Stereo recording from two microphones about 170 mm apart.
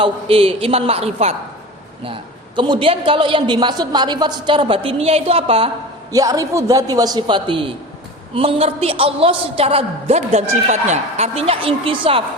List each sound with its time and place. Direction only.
0.0 s a woman's voice: 35° right (ahead or behind)
2.6 s a woman's voice: 30° right (ahead or behind)
6.1 s a woman's voice: 20° right (ahead or behind)